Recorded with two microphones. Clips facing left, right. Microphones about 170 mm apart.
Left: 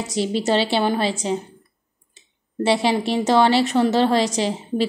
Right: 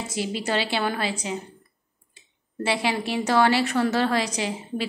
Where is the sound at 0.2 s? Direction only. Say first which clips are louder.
Left 6 dB; 30° left (ahead or behind).